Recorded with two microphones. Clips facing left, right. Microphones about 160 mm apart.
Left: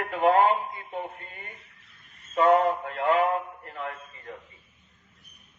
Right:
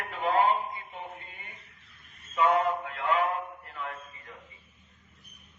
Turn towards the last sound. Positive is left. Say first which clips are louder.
# left 3 dB
turn(degrees=40)  # may be behind; listen again after turning